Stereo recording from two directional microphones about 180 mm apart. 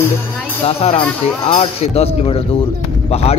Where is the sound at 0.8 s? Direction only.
35° left (ahead or behind).